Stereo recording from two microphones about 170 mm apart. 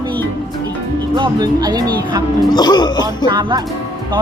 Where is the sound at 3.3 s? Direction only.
25° right (ahead or behind).